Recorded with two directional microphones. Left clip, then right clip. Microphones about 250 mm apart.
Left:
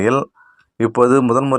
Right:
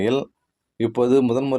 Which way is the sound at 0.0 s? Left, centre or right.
Centre.